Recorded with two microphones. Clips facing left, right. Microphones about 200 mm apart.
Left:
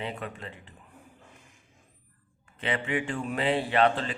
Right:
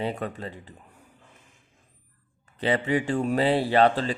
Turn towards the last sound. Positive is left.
turn(degrees=-35)  # may be behind; listen again after turning